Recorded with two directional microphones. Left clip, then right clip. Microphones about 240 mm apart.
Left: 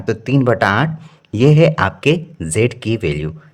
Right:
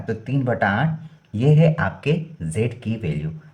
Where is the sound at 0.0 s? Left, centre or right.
Left.